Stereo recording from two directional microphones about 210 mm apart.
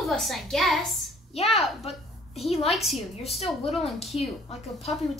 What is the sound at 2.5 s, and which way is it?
Speech, 30° left (ahead or behind).